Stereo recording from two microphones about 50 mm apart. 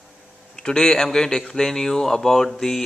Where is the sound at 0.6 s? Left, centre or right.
Centre.